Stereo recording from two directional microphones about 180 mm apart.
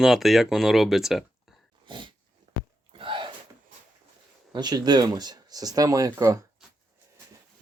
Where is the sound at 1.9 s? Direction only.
25° right (ahead or behind).